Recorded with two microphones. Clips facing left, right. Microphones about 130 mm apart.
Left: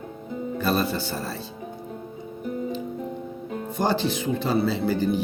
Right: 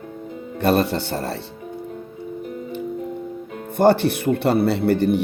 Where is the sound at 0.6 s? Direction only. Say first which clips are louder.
Right 7 dB; 70° right (ahead or behind).